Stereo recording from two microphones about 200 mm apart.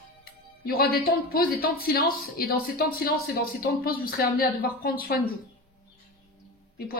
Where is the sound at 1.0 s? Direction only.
50° left (ahead or behind).